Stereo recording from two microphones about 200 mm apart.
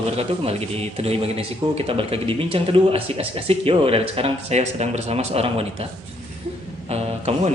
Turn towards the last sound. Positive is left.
turn(degrees=-30)  # may be behind; listen again after turning